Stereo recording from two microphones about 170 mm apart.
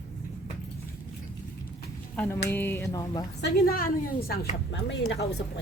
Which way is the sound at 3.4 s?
60° left (ahead or behind).